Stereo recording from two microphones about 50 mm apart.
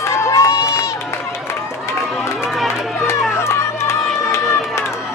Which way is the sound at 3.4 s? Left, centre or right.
Left.